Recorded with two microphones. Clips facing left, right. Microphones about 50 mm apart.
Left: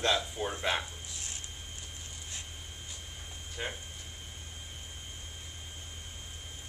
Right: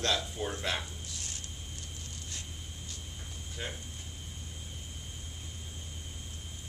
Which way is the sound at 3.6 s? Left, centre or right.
Centre.